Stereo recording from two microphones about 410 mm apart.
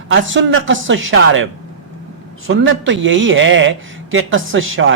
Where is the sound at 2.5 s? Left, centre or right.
Right.